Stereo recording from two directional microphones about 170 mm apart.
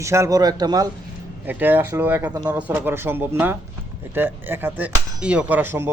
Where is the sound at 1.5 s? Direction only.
10° right (ahead or behind).